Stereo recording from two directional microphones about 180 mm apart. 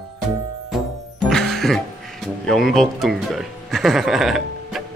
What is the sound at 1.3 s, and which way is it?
Music, centre (ahead or behind).